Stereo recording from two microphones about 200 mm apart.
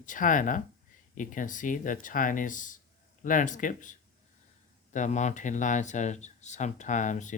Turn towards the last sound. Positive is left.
turn(degrees=40)  # may be behind; listen again after turning